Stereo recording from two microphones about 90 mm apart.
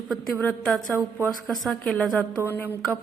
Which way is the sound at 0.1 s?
5° left (ahead or behind).